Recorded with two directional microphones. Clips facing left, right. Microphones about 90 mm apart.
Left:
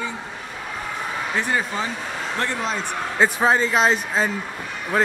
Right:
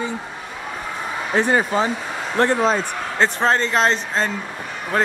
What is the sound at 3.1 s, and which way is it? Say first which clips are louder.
A man's voice: even; 5° left (ahead or behind).